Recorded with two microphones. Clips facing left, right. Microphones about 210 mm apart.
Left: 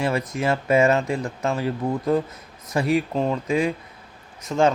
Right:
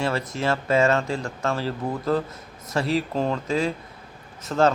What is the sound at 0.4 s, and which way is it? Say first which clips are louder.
Speech: left 2 dB; 20° left (ahead or behind).